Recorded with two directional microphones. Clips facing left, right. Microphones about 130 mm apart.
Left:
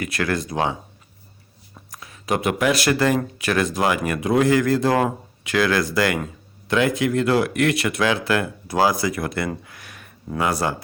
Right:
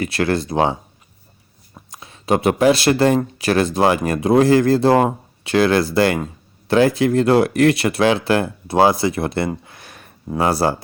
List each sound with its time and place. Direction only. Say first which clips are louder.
0.0 s speech: right 5 dB; 30° right (ahead or behind)